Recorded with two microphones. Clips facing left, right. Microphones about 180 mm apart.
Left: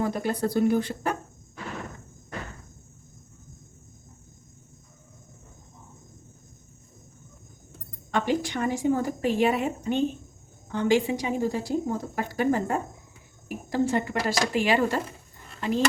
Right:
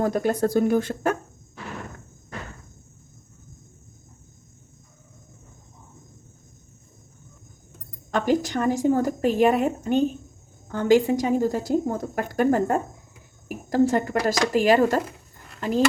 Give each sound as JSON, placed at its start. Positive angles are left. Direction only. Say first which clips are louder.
{"t": 0.0, "sound": "a woman's voice", "louder": "right 4 dB", "side_deg": -45}
{"t": 8.1, "sound": "a woman's voice", "louder": "right 4 dB", "side_deg": -45}